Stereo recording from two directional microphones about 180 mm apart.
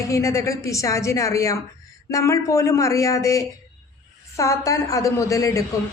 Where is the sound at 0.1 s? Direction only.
15° left (ahead or behind).